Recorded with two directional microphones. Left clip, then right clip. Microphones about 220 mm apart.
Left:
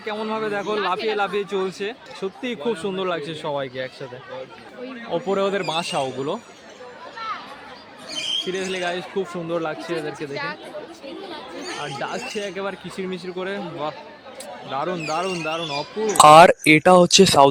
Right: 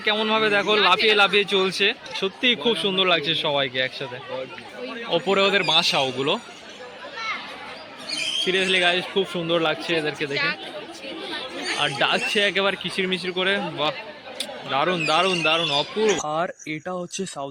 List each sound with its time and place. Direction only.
0.0 s speech: centre (ahead or behind)
5.1 s speech: 10° left (ahead or behind)
8.4 s speech: centre (ahead or behind)
9.9 s speech: 35° left (ahead or behind)
11.8 s a man's voice: 5° right (ahead or behind)
16.2 s speech: 50° left (ahead or behind)